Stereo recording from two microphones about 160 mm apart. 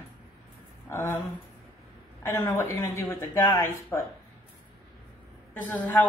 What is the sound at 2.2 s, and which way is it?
Speech, 15° left (ahead or behind).